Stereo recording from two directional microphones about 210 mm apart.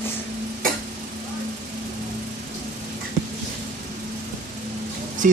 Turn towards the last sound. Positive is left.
turn(degrees=-40)  # may be behind; listen again after turning